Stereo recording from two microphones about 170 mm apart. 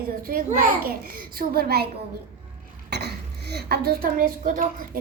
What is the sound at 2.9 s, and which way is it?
Cough, 75° right (ahead or behind).